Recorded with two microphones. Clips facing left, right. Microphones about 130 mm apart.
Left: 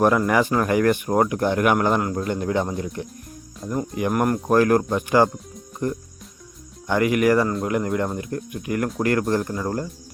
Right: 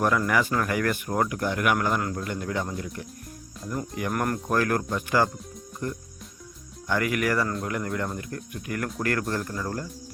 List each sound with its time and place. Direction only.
0.0 s speech: 30° left (ahead or behind)